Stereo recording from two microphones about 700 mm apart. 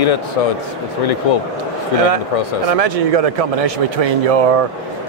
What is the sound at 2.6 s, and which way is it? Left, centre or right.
Speech, right.